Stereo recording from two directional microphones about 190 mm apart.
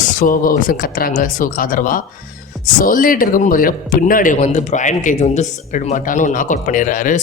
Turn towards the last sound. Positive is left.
turn(degrees=45)  # may be behind; listen again after turning